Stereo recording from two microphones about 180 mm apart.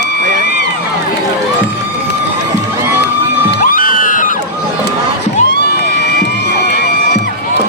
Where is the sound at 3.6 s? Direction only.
50° left (ahead or behind).